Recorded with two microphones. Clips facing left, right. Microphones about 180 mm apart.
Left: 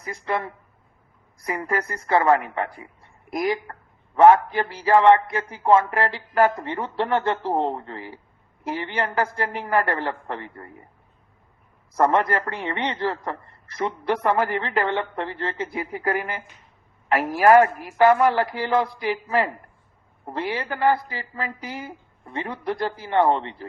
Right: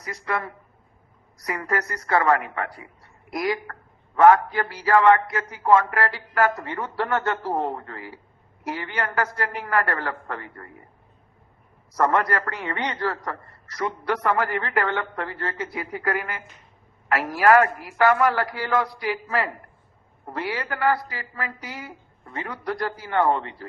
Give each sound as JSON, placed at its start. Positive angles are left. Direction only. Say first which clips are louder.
{"t": 0.0, "sound": "a man's voice", "louder": "left 2 dB", "side_deg": 25}
{"t": 11.9, "sound": "a man's voice", "louder": "left 2 dB", "side_deg": 25}